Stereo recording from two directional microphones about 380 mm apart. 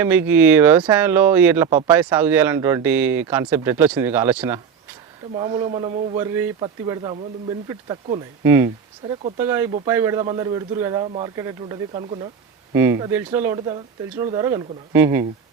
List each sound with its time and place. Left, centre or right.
0.0 s speech: centre